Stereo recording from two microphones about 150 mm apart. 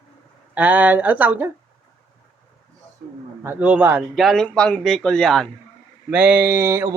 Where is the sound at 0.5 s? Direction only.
10° right (ahead or behind).